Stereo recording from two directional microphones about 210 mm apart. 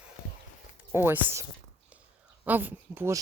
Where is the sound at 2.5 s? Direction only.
10° right (ahead or behind).